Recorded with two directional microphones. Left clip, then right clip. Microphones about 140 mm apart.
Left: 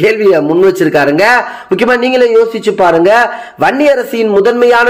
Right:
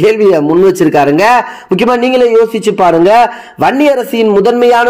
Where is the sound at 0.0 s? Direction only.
45° right (ahead or behind).